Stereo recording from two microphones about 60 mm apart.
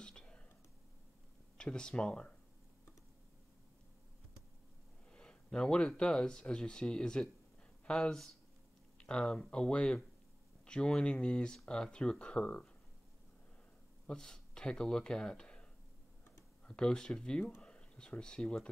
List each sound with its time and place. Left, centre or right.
0.0 s whispering: centre
1.6 s speech: centre
5.1 s speech: centre
14.0 s speech: centre
16.6 s speech: centre